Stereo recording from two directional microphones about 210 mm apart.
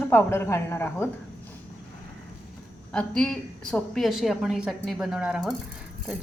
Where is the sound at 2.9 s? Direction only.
5° left (ahead or behind).